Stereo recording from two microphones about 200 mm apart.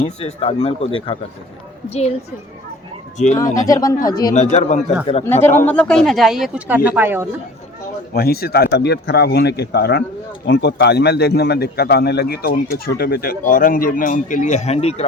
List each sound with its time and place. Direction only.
0.0 s speech: 30° left (ahead or behind)
3.4 s speech: 40° left (ahead or behind)
3.7 s speech: 15° left (ahead or behind)
4.4 s speech: 35° left (ahead or behind)
5.2 s speech: 10° left (ahead or behind); by 7.3 s 10° right (ahead or behind)
8.1 s a man's voice: 50° left (ahead or behind); by 15.0 s 30° left (ahead or behind)